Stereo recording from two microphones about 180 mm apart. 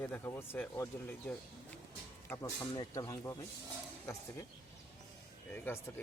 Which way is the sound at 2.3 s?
20° left (ahead or behind).